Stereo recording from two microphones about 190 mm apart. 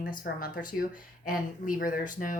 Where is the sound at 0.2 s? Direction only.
50° left (ahead or behind).